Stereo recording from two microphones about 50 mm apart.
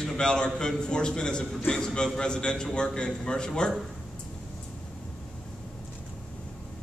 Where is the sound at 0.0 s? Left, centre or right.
Centre.